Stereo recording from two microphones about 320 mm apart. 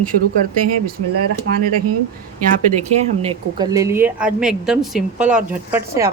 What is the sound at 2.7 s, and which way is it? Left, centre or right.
A woman's voice, centre.